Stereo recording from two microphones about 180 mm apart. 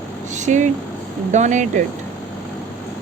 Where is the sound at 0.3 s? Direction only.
40° right (ahead or behind).